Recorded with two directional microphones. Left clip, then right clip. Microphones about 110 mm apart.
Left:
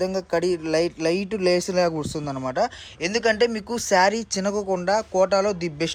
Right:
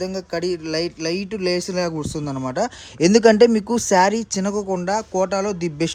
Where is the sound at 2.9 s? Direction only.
85° right.